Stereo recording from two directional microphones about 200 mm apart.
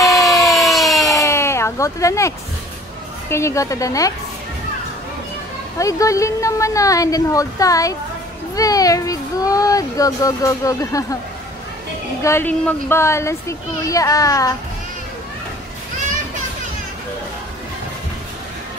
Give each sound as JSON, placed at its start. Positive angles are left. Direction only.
{"t": 0.0, "sound": "fire engine", "side_deg": 0}
{"t": 1.2, "sound": "a sound", "side_deg": 15}
{"t": 3.3, "sound": "speech", "side_deg": 15}
{"t": 5.8, "sound": "speech", "side_deg": 15}
{"t": 12.2, "sound": "speech", "side_deg": 15}